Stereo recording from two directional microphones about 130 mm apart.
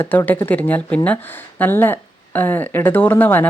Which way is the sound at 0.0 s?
15° left (ahead or behind).